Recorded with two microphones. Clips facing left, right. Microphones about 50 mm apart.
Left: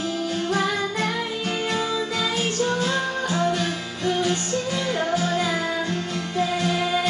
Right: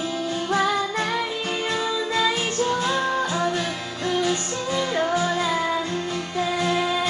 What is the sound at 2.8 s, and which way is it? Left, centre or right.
Music, right.